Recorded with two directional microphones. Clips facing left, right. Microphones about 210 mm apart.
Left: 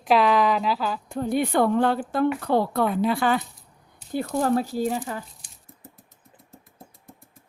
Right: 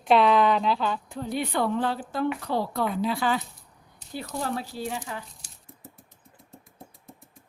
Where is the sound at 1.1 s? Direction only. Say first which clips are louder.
Left 6 dB; 50° left (ahead or behind).